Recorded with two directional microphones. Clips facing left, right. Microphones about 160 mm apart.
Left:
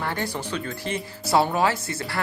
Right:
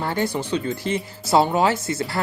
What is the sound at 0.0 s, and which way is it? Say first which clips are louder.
Speech: right 5 dB; 25° right (ahead or behind).